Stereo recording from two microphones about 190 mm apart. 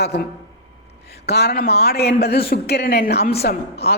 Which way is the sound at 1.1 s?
60° left (ahead or behind).